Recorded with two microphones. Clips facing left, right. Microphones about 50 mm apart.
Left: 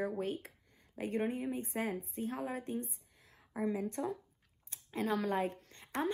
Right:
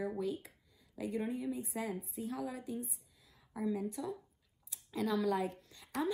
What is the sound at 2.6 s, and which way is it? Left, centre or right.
Speech, left.